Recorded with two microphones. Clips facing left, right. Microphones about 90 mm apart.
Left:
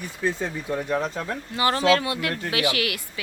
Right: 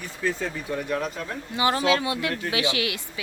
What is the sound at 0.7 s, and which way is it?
Speech, 30° left (ahead or behind).